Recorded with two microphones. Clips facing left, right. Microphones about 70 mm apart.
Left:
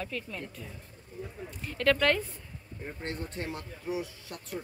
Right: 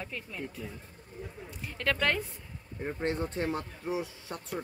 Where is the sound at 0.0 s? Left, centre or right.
Centre.